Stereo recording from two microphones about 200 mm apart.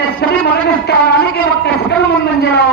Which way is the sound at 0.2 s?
55° left (ahead or behind).